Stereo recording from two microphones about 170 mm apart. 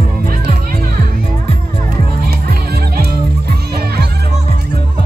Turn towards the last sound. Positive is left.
turn(degrees=-65)  # may be behind; listen again after turning